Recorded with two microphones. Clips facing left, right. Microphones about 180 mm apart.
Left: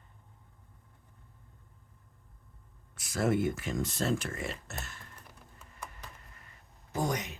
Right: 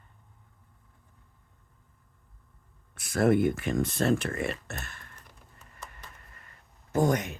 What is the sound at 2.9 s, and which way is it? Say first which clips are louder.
Speech: right 6 dB; 55° right (ahead or behind).